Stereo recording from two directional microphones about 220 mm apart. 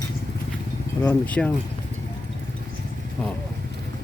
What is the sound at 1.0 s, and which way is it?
Speech, 5° left (ahead or behind).